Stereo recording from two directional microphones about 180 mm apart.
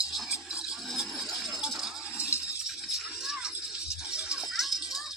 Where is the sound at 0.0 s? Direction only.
Centre (ahead or behind).